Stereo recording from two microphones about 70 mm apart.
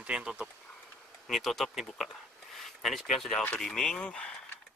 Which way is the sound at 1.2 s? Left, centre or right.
Centre.